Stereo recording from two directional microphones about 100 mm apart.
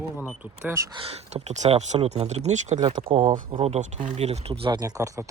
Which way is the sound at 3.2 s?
45° right (ahead or behind).